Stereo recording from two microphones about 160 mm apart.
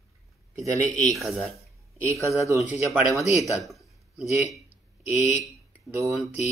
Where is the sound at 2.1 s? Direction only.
20° right (ahead or behind).